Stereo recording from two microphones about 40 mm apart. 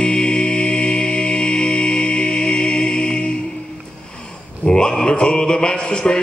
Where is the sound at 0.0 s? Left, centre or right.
Centre.